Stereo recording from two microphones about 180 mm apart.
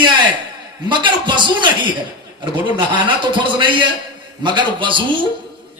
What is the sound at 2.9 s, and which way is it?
A man's voice, 25° right (ahead or behind).